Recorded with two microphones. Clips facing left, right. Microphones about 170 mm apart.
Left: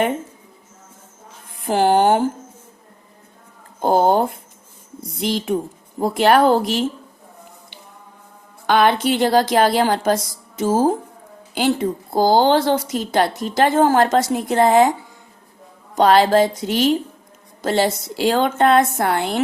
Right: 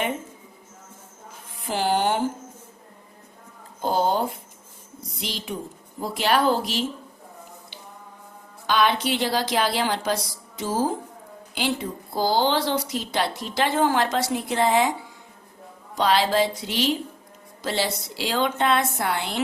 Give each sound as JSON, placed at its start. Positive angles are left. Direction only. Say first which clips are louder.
{"t": 1.6, "sound": "a woman's voice", "louder": "left 8 dB", "side_deg": 50}
{"t": 3.8, "sound": "speech", "louder": "left 7 dB", "side_deg": 55}
{"t": 5.2, "sound": "a woman's voice", "louder": "left 11 dB", "side_deg": 55}
{"t": 8.6, "sound": "a woman's voice", "louder": "left 6 dB", "side_deg": 55}
{"t": 16.0, "sound": "a woman's voice", "louder": "left 7 dB", "side_deg": 50}